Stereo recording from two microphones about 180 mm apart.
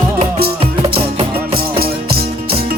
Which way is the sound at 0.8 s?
30° right (ahead or behind).